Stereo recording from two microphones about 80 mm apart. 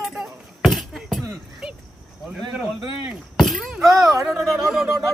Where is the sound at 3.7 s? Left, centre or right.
Centre.